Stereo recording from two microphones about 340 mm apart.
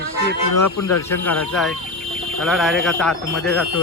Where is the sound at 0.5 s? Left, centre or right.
Left.